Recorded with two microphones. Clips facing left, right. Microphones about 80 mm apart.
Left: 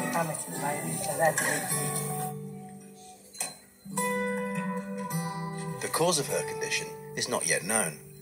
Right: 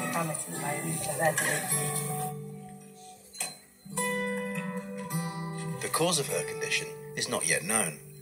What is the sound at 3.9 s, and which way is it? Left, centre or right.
Music, left.